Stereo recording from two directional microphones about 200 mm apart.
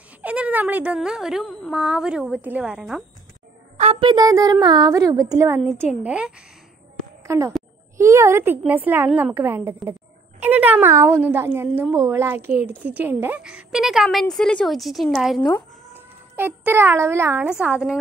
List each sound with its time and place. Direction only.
0.2 s a woman's voice: 5° right (ahead or behind)
3.7 s a woman's voice: 30° right (ahead or behind); by 17.9 s 5° right (ahead or behind)